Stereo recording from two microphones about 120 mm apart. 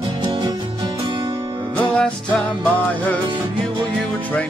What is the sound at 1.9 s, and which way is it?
Music, 5° left (ahead or behind).